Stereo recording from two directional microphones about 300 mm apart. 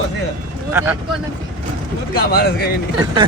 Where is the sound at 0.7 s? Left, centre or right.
Centre.